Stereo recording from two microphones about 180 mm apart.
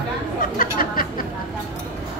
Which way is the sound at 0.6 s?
50° left (ahead or behind).